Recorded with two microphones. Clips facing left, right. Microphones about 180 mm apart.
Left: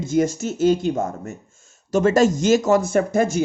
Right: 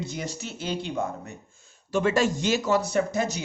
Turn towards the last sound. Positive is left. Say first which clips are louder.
# left 7 dB
turn(degrees=50)  # may be behind; listen again after turning